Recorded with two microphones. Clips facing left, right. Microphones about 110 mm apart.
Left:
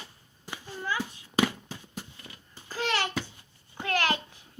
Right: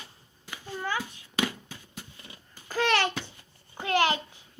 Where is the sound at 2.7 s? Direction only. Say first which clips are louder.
Right 4 dB; 65° right (ahead or behind).